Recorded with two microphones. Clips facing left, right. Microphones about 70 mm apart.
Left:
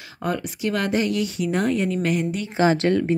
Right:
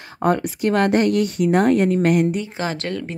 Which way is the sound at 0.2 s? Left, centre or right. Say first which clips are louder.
Right 6 dB; right.